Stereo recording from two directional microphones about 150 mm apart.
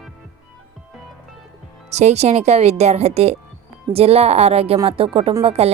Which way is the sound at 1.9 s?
45° right (ahead or behind).